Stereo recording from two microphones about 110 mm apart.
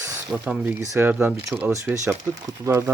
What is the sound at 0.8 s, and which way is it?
Speech, 25° right (ahead or behind).